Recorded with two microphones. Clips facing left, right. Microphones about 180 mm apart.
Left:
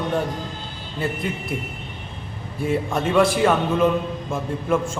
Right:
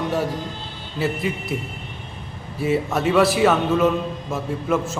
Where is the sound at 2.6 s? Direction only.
5° right (ahead or behind).